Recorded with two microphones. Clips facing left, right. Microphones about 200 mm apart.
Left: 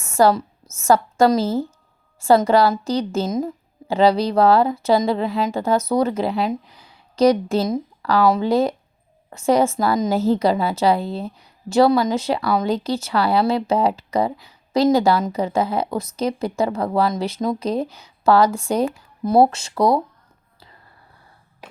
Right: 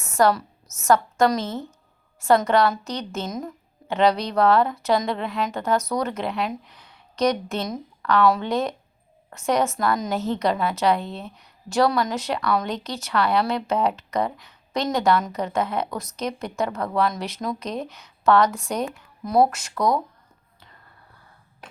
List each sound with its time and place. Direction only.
0.2 s a woman's voice: 30° left (ahead or behind)